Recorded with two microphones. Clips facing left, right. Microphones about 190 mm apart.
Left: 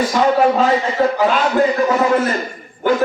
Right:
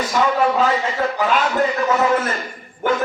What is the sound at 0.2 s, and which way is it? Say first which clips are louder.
A man's voice: left 3 dB; 40° left (ahead or behind).